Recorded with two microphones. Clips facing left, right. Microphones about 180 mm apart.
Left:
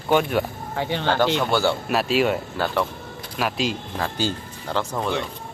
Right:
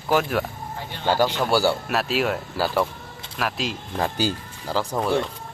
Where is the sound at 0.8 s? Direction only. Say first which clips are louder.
Left 14 dB; 75° left (ahead or behind).